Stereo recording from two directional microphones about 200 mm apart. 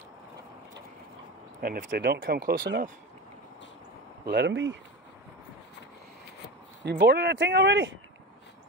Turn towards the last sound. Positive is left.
turn(degrees=-65)  # may be behind; listen again after turning